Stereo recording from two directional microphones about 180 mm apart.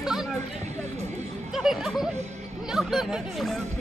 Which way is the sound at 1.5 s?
Centre (ahead or behind).